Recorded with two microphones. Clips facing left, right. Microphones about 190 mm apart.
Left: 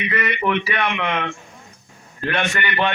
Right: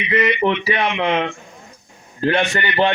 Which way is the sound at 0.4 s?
25° right (ahead or behind).